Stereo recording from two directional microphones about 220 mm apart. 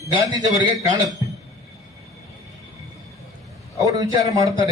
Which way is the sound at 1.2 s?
15° right (ahead or behind).